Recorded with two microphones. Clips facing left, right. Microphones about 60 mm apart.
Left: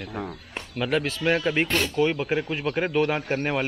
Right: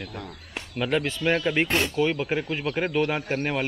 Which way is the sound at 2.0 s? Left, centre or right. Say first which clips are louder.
Left 1 dB; centre.